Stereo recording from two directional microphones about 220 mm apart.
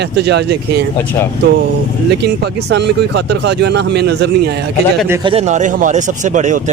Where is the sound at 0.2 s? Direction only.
50° right (ahead or behind).